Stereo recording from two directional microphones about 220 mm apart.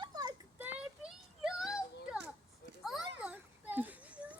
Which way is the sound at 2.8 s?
Centre (ahead or behind).